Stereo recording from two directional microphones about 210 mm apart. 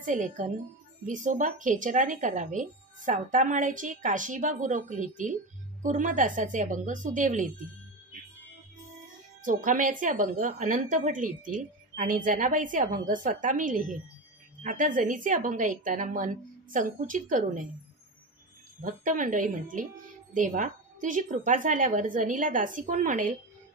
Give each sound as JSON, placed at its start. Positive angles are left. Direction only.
{"t": 0.0, "sound": "speech", "side_deg": -35}
{"t": 9.4, "sound": "speech", "side_deg": -40}
{"t": 18.8, "sound": "speech", "side_deg": -40}